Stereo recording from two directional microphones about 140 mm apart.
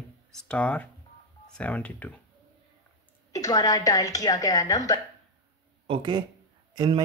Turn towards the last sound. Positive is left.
turn(degrees=-30)  # may be behind; listen again after turning